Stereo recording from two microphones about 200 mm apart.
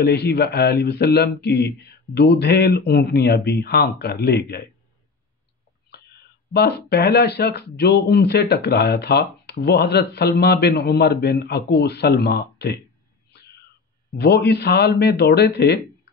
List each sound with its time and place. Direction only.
0.0 s speech: 55° left (ahead or behind)
5.9 s speech: 55° left (ahead or behind)
14.1 s a man's voice: 55° left (ahead or behind)